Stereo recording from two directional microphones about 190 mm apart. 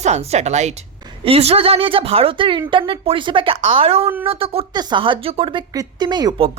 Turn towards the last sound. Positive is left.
turn(degrees=-25)  # may be behind; listen again after turning